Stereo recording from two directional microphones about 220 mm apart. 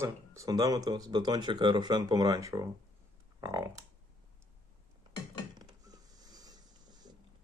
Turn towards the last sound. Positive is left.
turn(degrees=-15)  # may be behind; listen again after turning